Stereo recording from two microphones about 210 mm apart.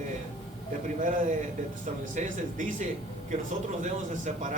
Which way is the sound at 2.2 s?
35° right (ahead or behind).